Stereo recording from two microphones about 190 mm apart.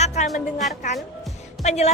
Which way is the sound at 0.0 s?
35° left (ahead or behind).